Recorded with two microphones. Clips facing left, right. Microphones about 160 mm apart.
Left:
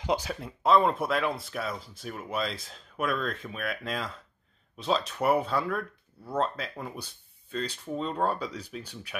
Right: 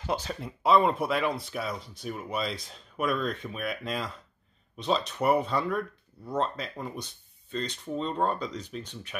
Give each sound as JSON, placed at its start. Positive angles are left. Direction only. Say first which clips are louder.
{"t": 0.0, "sound": "speech", "louder": "left 2 dB", "side_deg": 15}
{"t": 0.4, "sound": "speech", "louder": "right 1 dB", "side_deg": 0}